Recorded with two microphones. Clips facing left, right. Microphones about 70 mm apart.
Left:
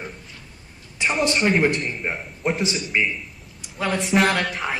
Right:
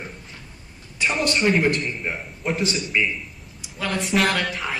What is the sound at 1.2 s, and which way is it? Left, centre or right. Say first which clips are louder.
A man's voice: left 1 dB; centre.